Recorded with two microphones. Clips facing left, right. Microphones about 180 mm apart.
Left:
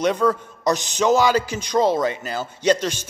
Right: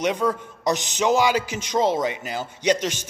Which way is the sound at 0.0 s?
15° right (ahead or behind).